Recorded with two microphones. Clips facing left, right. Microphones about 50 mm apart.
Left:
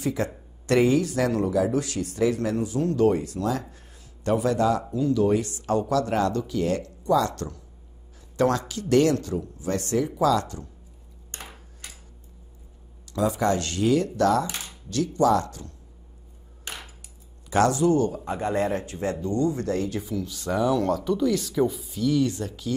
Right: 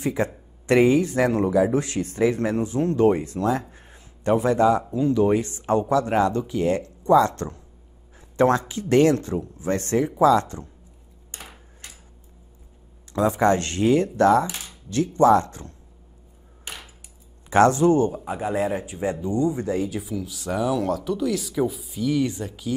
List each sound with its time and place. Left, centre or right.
0.0 s speech: right
3.7 s a sound: right
4.9 s speech: right
13.1 s speech: right
17.5 s speech: right
18.1 s speech: centre
22.0 s speech: centre